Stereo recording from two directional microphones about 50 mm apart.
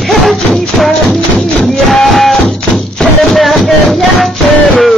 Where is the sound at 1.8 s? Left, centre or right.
Centre.